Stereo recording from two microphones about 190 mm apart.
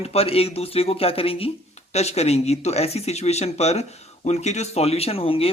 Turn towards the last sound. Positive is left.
turn(degrees=30)  # may be behind; listen again after turning